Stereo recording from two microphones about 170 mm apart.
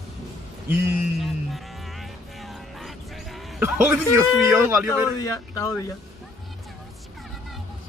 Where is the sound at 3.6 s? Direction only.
10° right (ahead or behind).